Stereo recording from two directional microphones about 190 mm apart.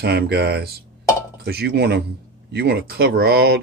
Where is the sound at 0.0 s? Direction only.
60° right (ahead or behind).